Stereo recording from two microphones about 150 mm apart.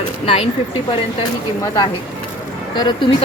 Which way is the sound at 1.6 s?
30° left (ahead or behind).